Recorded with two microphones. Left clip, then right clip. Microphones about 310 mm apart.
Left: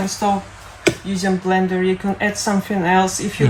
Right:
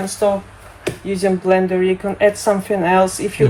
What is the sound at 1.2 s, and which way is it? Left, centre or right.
Speech, centre.